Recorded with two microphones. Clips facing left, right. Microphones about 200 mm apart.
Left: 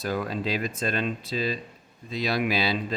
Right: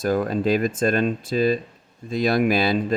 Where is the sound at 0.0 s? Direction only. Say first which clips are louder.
Right 7 dB; 45° right (ahead or behind).